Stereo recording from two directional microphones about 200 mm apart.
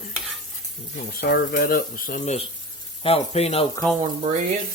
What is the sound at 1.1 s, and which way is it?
Speech, 50° left (ahead or behind).